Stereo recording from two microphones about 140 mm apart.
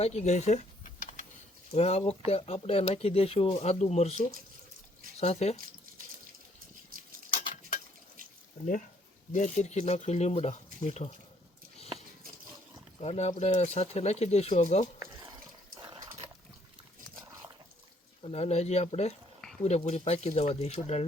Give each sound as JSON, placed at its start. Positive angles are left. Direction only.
{"t": 0.0, "sound": "speech", "side_deg": 50}
{"t": 1.7, "sound": "speech", "side_deg": 45}
{"t": 5.2, "sound": "speech", "side_deg": 50}
{"t": 6.9, "sound": "a sound", "side_deg": -90}
{"t": 7.3, "sound": "a sound", "side_deg": 70}
{"t": 9.3, "sound": "speech", "side_deg": 60}
{"t": 13.0, "sound": "speech", "side_deg": 50}
{"t": 15.8, "sound": "dog", "side_deg": -30}
{"t": 18.2, "sound": "speech", "side_deg": 45}